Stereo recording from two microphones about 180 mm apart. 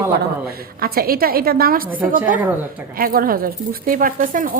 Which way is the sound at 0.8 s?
55° right (ahead or behind).